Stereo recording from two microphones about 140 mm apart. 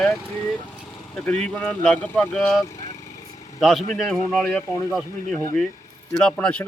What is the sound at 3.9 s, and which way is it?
Speech, centre (ahead or behind).